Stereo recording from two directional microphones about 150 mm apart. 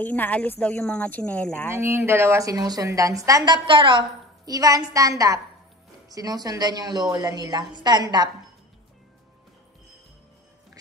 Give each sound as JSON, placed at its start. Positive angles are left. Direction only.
{"t": 0.0, "sound": "speech", "side_deg": 10}
{"t": 1.7, "sound": "a woman's voice", "side_deg": -15}
{"t": 4.5, "sound": "a woman's voice", "side_deg": -25}